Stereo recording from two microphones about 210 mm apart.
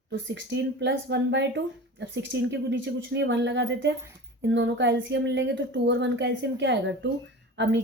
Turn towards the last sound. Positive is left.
turn(degrees=-55)  # may be behind; listen again after turning